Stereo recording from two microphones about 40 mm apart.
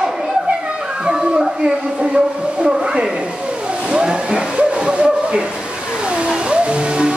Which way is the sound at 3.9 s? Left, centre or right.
Right.